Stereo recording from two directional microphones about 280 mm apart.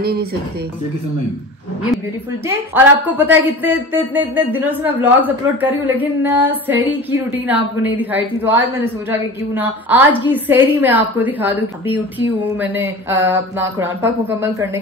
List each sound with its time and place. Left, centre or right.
0.0 s speech: right
2.4 s a woman's voice: centre